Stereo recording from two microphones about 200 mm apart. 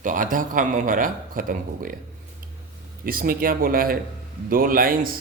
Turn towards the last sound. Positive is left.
turn(degrees=-45)  # may be behind; listen again after turning